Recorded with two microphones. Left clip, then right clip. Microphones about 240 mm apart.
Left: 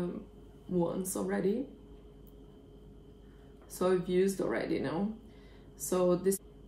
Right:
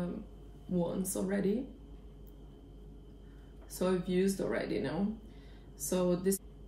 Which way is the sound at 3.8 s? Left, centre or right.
Centre.